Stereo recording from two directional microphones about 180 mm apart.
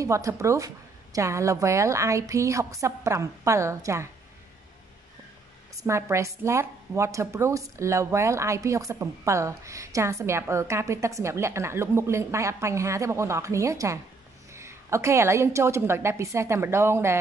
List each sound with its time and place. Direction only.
0.0 s a woman's voice: 15° right (ahead or behind)
5.8 s a woman's voice: 15° right (ahead or behind)